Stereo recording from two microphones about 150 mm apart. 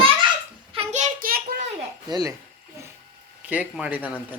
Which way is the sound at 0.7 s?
45° right (ahead or behind).